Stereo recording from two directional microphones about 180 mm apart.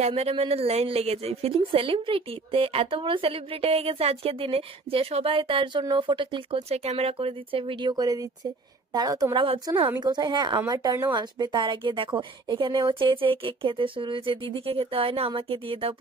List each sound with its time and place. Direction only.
0.0 s a woman's voice: 35° right (ahead or behind)